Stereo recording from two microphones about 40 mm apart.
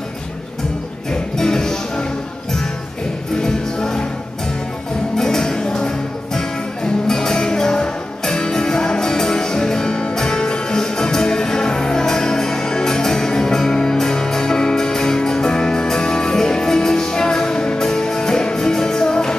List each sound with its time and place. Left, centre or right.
1.4 s music: centre
3.4 s music: centre
5.1 s music: centre